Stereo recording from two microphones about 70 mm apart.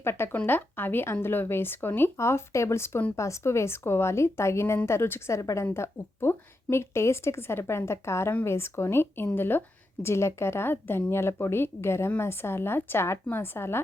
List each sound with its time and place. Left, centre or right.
0.0 s a woman's voice: left
2.1 s a woman's voice: left
5.4 s a woman's voice: left
5.7 s a woman's voice: left